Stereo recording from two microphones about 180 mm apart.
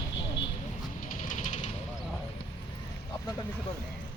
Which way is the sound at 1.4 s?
35° left (ahead or behind).